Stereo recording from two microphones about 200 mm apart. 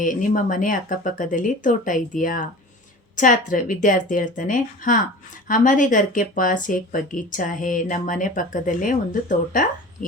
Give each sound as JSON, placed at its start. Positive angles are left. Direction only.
{"t": 0.0, "sound": "speech", "side_deg": 40}